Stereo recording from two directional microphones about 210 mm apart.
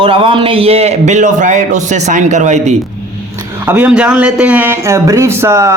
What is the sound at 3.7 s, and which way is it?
Speech, 5° right (ahead or behind).